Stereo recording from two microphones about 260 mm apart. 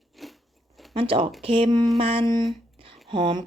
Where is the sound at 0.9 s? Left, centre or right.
Centre.